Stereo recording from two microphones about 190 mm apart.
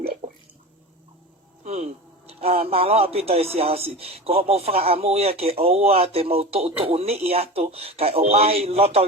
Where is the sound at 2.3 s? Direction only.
30° right (ahead or behind).